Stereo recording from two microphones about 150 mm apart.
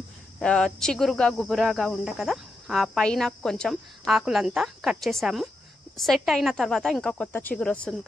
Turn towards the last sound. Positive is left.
turn(degrees=5)  # may be behind; listen again after turning